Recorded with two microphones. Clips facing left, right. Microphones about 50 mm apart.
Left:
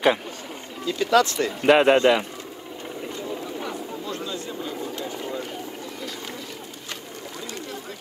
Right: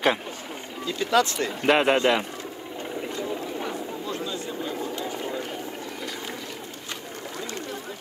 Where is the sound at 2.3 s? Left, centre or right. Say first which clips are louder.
Right 1 dB; centre.